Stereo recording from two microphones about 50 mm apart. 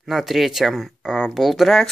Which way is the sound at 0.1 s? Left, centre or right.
Centre.